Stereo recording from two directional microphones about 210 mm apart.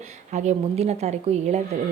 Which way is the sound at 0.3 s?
30° right (ahead or behind).